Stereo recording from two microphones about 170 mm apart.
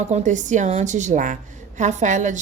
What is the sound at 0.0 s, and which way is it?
A woman's voice, 45° right (ahead or behind).